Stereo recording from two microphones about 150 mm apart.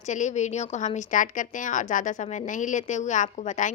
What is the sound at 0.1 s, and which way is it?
A woman's voice, 55° left (ahead or behind).